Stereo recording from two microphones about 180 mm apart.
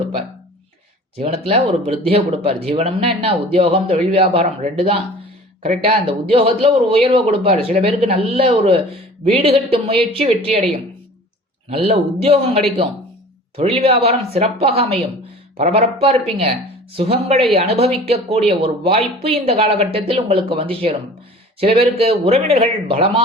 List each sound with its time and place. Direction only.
1.1 s speech: 35° right (ahead or behind)
11.7 s speech: 35° right (ahead or behind)